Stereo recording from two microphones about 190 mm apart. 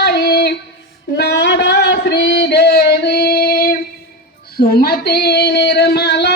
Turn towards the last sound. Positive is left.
turn(degrees=60)  # may be behind; listen again after turning